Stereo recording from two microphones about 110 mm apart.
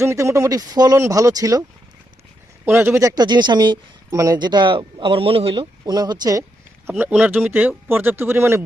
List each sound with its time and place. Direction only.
0.0 s speech: 25° right (ahead or behind)
2.6 s speech: 20° right (ahead or behind)
3.2 s speech: 40° right (ahead or behind); by 5.6 s 60° right (ahead or behind)
5.8 s speech: 40° right (ahead or behind)
7.0 s speech: 15° right (ahead or behind)